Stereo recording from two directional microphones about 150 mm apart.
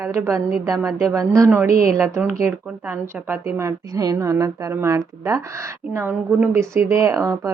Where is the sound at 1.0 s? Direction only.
20° right (ahead or behind).